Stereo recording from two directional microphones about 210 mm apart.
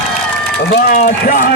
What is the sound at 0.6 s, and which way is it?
Speech, 50° left (ahead or behind).